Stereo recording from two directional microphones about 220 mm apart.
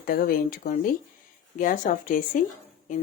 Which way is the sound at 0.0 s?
40° left (ahead or behind).